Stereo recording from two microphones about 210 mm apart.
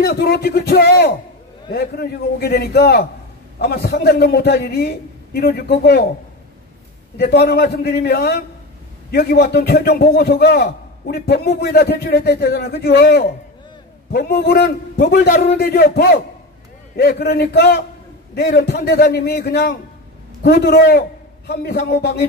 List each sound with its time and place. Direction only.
0.0 s a man's voice: 50° left (ahead or behind)
7.2 s a man's voice: 50° left (ahead or behind)